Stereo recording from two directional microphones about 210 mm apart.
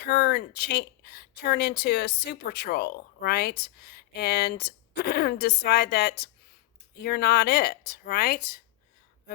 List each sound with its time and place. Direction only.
0.0 s speech: 50° left (ahead or behind)